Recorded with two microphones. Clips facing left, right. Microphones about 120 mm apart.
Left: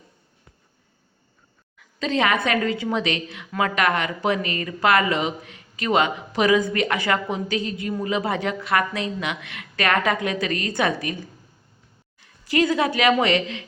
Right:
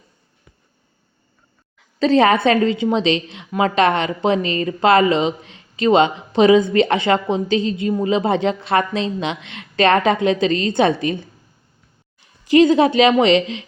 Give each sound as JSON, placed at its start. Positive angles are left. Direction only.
{"t": 2.0, "sound": "a woman's voice", "side_deg": -35}
{"t": 12.2, "sound": "speech", "side_deg": -20}